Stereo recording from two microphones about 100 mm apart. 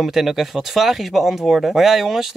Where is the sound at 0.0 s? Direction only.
5° right (ahead or behind).